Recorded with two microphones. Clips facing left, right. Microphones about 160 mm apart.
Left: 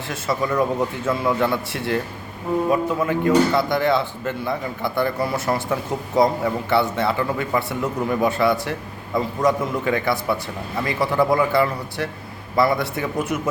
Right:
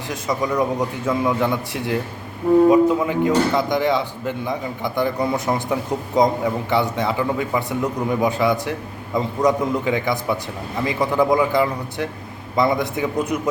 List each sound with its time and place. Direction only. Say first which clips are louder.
0.1 s speech: right 1 dB; 15° right (ahead or behind)